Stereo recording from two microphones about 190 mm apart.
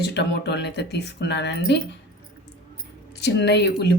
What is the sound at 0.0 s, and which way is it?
Speech, 60° left (ahead or behind).